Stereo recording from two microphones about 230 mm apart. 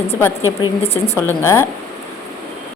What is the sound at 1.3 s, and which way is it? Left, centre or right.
Speech, centre.